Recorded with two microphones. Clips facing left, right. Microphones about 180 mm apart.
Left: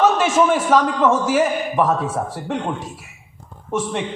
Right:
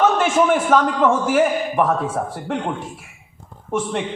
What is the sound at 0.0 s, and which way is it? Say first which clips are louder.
A man's voice: left 1 dB; 55° right (ahead or behind).